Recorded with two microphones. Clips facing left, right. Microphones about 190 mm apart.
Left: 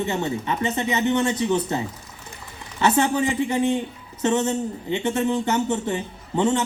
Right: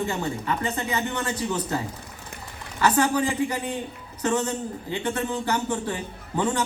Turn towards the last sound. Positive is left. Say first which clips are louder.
# left 4 dB
turn(degrees=25)  # may be behind; listen again after turning